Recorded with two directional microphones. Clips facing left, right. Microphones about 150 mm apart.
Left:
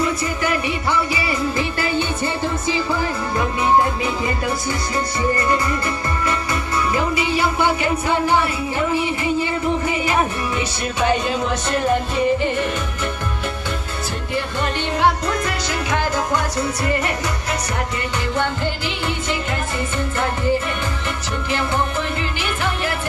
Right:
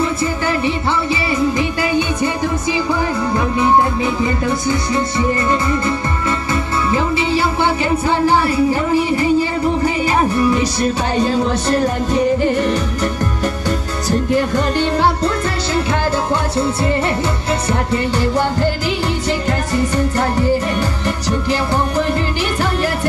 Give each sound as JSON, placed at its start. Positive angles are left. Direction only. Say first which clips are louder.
{"t": 0.0, "sound": "music", "louder": "right 3 dB", "side_deg": -30}
{"t": 18.2, "sound": "music", "louder": "right 6 dB", "side_deg": -35}